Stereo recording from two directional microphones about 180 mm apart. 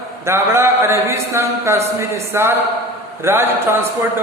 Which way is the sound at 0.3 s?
15° right (ahead or behind).